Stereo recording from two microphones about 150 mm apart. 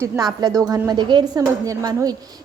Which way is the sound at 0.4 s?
25° right (ahead or behind).